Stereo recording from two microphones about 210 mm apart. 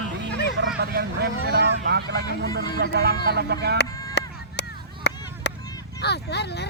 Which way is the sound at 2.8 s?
50° right (ahead or behind).